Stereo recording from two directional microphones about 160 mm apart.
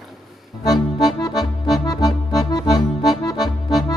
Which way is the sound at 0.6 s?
25° left (ahead or behind).